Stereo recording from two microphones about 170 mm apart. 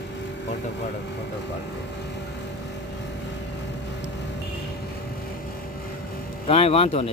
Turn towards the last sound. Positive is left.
turn(degrees=35)  # may be behind; listen again after turning